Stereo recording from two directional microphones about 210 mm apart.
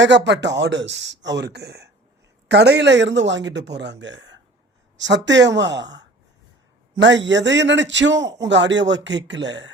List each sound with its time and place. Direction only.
0.0 s a man's voice: 60° right (ahead or behind)